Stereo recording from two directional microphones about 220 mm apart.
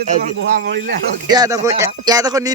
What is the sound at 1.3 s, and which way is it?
Speech, 15° right (ahead or behind).